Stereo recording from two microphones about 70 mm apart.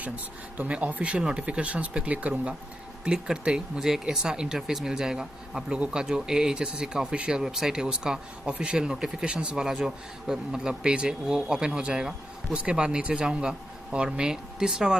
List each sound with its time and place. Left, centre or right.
0.0 s speech: right